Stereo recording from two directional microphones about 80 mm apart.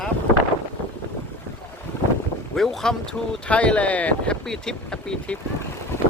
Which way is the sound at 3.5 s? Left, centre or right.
Centre.